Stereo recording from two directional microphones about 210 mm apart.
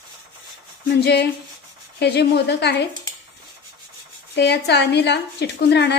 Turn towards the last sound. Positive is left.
turn(degrees=55)  # may be behind; listen again after turning